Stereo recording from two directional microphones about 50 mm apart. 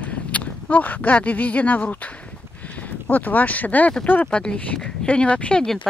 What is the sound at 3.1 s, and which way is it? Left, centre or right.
Speech, left.